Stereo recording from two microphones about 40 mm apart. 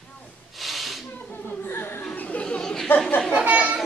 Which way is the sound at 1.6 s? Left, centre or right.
Left.